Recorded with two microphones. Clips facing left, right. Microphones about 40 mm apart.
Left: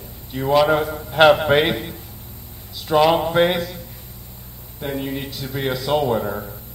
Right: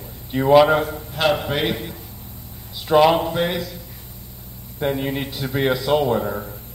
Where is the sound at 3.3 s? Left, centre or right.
Left.